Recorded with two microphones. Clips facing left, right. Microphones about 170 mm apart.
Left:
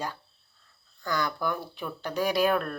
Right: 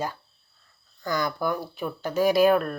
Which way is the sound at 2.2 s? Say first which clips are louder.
Right 6 dB; 45° right (ahead or behind).